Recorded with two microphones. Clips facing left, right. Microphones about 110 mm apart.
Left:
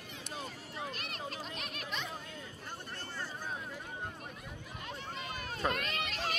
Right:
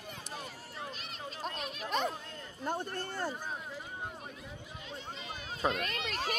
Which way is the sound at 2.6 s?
50° right (ahead or behind).